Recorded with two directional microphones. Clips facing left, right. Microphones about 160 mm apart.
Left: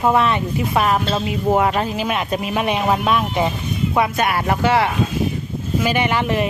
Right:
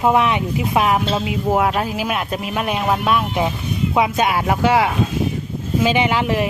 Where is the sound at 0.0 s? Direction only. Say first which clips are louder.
Even; 15° right (ahead or behind).